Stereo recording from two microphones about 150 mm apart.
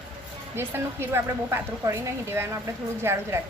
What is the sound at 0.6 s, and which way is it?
A woman's voice, 15° right (ahead or behind).